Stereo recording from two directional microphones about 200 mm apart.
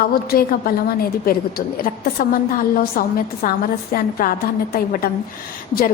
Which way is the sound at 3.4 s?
45° left (ahead or behind).